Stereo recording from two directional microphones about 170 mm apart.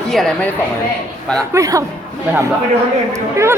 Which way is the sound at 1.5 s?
20° right (ahead or behind).